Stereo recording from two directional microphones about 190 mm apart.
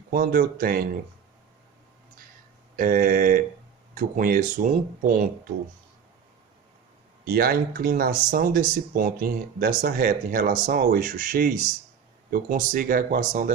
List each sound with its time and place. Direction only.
0.1 s speech: 55° right (ahead or behind)
2.7 s speech: 50° right (ahead or behind)
7.3 s speech: 50° right (ahead or behind)